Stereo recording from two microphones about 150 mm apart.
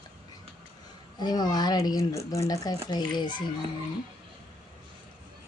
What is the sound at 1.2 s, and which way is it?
Speech, 25° left (ahead or behind).